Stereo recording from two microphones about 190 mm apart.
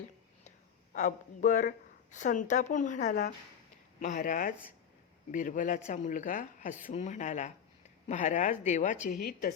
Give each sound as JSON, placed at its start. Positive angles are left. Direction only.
{"t": 0.9, "sound": "speech", "side_deg": 40}